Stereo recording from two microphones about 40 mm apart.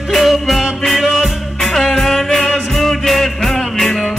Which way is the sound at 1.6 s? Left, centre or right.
Centre.